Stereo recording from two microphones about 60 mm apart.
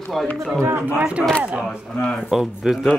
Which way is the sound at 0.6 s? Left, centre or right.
Right.